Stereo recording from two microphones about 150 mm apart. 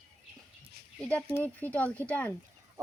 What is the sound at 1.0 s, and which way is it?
Speech, 10° left (ahead or behind).